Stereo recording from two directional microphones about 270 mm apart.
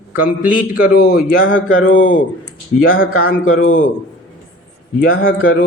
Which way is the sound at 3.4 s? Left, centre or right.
Left.